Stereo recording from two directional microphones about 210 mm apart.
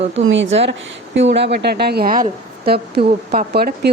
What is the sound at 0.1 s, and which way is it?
A woman's voice, 60° right (ahead or behind).